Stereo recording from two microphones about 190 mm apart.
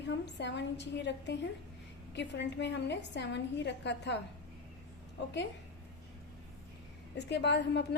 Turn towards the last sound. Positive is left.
turn(degrees=65)  # may be behind; listen again after turning